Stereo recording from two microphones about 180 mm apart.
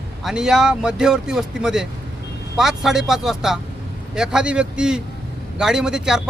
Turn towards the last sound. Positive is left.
turn(degrees=-5)  # may be behind; listen again after turning